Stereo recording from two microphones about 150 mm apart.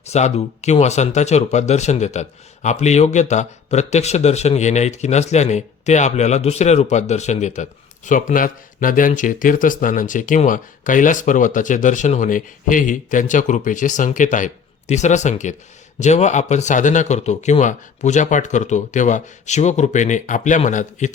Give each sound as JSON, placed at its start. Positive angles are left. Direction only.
{"t": 0.1, "sound": "speech", "side_deg": 50}